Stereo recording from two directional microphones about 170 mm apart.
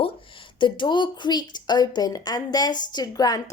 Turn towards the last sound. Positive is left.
turn(degrees=20)  # may be behind; listen again after turning